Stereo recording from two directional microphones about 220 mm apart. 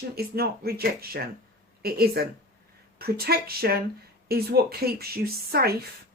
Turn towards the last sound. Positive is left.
turn(degrees=-45)  # may be behind; listen again after turning